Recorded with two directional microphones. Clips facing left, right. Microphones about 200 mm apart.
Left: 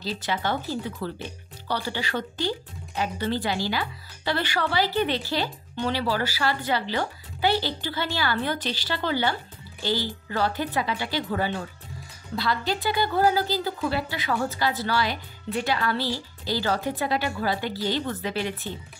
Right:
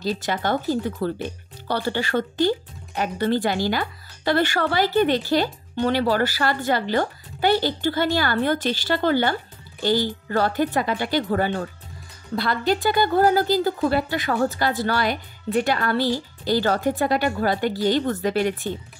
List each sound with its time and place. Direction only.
0.0 s speech: 50° right (ahead or behind)